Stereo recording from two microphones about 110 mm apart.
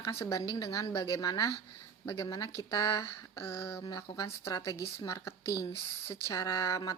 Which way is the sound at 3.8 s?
40° left (ahead or behind).